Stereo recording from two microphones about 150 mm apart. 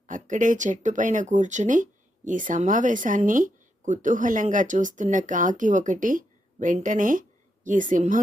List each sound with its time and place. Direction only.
0.1 s speech: 60° right (ahead or behind)